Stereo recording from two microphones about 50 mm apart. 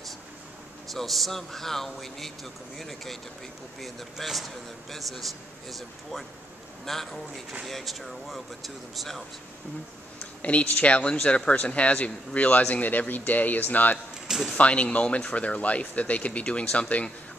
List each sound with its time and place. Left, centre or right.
0.9 s a man's voice: centre
10.4 s speech: left
14.2 s a sound: centre
14.6 s speech: left